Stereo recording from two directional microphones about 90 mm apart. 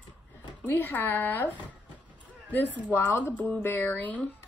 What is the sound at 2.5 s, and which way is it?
Speech, 20° left (ahead or behind).